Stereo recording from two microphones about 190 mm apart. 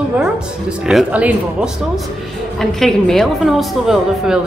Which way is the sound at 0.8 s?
5° right (ahead or behind).